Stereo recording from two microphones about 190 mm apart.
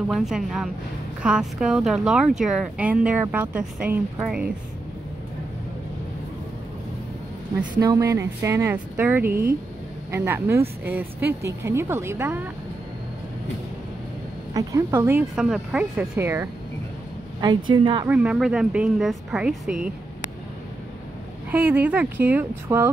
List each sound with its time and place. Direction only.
0.1 s speech: centre (ahead or behind)
7.7 s speech: 20° right (ahead or behind)
14.5 s speech: 15° right (ahead or behind)
17.6 s speech: 25° right (ahead or behind)
18.0 s speech: 5° right (ahead or behind)
21.5 s speech: 10° right (ahead or behind)